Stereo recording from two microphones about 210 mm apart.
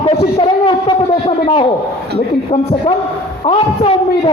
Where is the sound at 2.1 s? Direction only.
25° left (ahead or behind).